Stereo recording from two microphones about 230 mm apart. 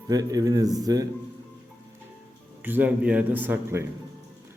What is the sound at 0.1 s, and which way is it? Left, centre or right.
Speech, centre.